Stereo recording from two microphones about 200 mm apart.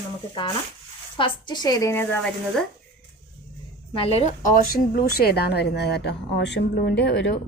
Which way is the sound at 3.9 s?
30° left (ahead or behind).